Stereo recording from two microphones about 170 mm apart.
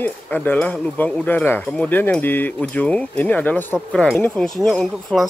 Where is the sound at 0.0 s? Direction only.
10° left (ahead or behind).